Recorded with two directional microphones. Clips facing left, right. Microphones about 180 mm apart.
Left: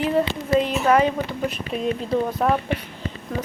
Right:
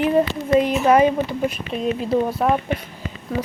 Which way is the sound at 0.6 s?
15° right (ahead or behind).